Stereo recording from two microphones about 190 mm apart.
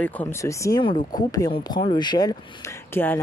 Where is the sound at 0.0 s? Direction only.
10° left (ahead or behind).